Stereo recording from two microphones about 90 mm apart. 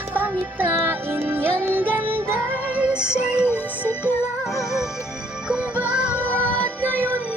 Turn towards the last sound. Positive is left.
turn(degrees=-20)  # may be behind; listen again after turning